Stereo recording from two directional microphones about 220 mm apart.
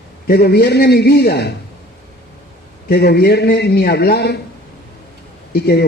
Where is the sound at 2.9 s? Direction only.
45° left (ahead or behind).